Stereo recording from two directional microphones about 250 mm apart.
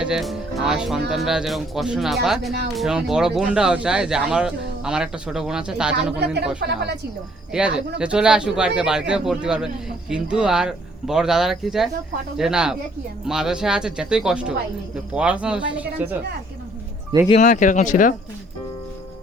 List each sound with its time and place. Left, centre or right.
0.0 s speech: centre
6.6 s speech: right
7.5 s speech: centre
17.2 s speech: left